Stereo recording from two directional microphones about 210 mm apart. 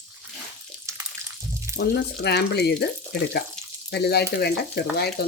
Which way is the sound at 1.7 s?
50° left (ahead or behind).